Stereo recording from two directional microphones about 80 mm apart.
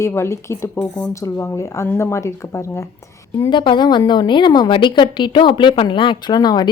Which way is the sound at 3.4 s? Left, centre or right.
Left.